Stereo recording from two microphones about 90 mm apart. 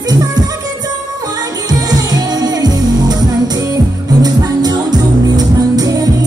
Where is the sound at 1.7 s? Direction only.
45° right (ahead or behind).